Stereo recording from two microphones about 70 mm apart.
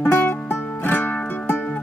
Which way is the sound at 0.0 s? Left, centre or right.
Left.